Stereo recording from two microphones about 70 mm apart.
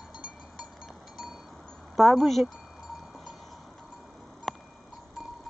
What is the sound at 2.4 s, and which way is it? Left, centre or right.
Cowbell, centre.